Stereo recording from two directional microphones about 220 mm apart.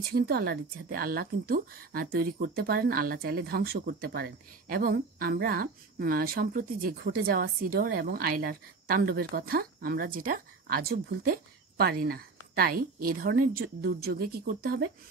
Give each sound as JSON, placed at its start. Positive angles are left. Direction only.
{"t": 0.1, "sound": "a woman's voice", "side_deg": -45}